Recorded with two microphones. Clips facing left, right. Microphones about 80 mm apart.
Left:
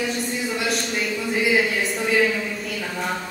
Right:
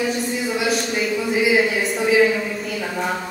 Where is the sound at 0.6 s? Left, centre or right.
Centre.